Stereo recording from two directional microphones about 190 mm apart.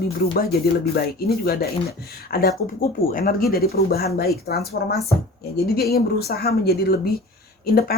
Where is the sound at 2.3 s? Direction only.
50° left (ahead or behind).